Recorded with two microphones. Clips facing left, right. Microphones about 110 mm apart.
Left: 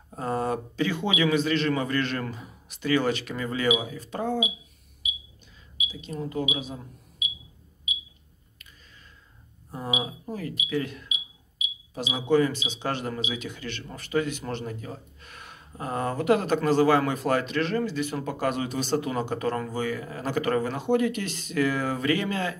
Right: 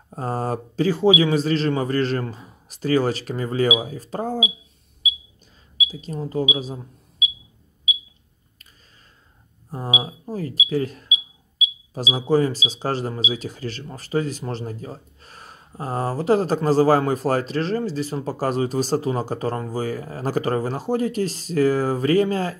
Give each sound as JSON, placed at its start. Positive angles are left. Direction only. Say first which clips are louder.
{"t": 0.1, "sound": "speech", "louder": "right 2 dB", "side_deg": -35}
{"t": 5.9, "sound": "speech", "louder": "right 2 dB", "side_deg": -40}
{"t": 10.0, "sound": "speech", "louder": "right 4 dB", "side_deg": -35}